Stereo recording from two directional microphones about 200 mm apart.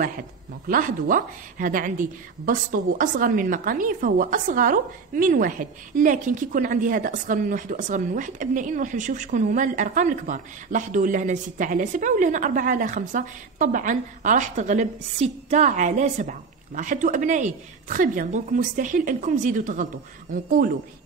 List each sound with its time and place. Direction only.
0.7 s a woman's voice: 45° right (ahead or behind)